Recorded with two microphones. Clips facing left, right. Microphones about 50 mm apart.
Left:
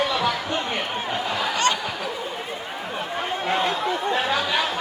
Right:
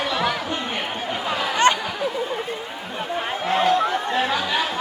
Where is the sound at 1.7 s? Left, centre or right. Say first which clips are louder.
Right 6 dB; right.